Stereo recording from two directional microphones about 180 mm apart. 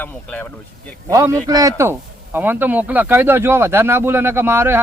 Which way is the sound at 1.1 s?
15° right (ahead or behind).